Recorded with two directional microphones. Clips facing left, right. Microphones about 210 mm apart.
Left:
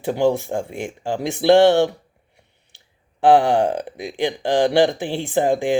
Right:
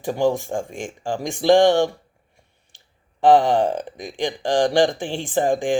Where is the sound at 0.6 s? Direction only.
10° left (ahead or behind).